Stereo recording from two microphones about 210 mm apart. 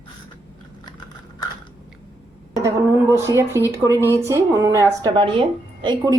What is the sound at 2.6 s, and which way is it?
A woman's voice, 15° right (ahead or behind).